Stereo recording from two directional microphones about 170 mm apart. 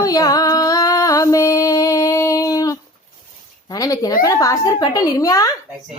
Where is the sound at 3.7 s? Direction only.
20° left (ahead or behind).